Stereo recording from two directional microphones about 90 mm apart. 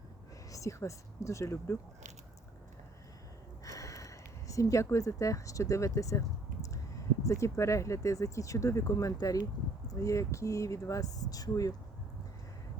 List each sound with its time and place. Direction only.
0.5 s speech: 35° left (ahead or behind)
3.6 s a sound: 40° left (ahead or behind)
7.3 s speech: 35° left (ahead or behind)